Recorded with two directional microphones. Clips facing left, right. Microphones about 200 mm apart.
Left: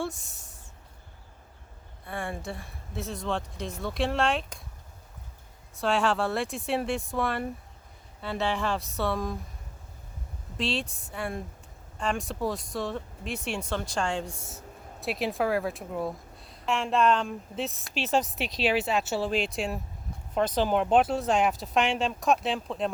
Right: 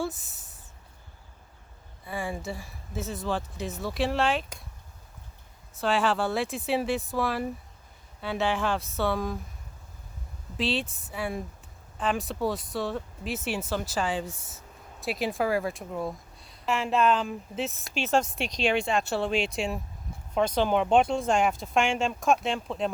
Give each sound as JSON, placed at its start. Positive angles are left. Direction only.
{"t": 0.0, "sound": "a sound", "side_deg": 0}
{"t": 2.0, "sound": "a woman's voice", "side_deg": 0}
{"t": 5.7, "sound": "a woman's voice", "side_deg": 0}
{"t": 10.6, "sound": "a woman's voice", "side_deg": 0}